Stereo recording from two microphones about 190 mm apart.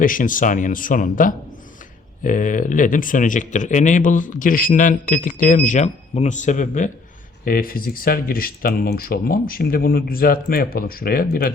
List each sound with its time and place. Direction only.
0.0 s speech: 45° left (ahead or behind)